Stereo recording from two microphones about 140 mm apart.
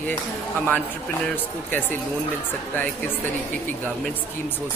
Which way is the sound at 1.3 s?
15° left (ahead or behind).